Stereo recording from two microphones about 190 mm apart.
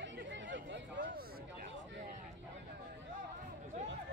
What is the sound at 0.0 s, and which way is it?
Chatter, 70° right (ahead or behind).